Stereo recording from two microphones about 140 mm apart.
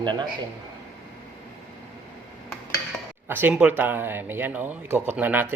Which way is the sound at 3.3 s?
15° right (ahead or behind).